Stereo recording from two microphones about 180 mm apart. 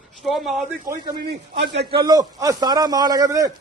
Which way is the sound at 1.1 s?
65° right (ahead or behind).